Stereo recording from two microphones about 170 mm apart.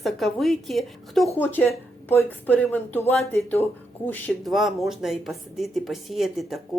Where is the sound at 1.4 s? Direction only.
10° left (ahead or behind).